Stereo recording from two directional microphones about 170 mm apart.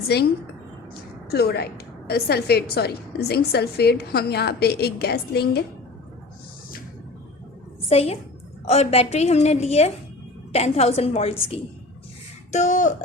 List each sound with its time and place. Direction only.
0.1 s a woman's voice: 75° left (ahead or behind)
1.3 s a woman's voice: 65° left (ahead or behind)
7.9 s a woman's voice: 35° left (ahead or behind)
12.5 s speech: 45° left (ahead or behind)